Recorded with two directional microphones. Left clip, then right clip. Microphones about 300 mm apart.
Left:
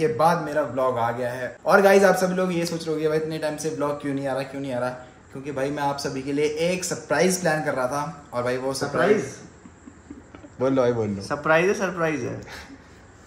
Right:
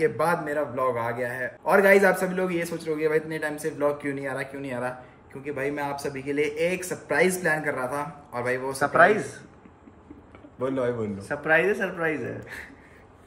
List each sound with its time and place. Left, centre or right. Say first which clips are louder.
0.0 s a man's voice: left 3 dB; centre
10.6 s a man's voice: left 6 dB; left
11.2 s a man's voice: left 2 dB; centre